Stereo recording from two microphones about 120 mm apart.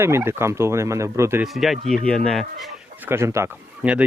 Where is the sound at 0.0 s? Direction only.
20° right (ahead or behind).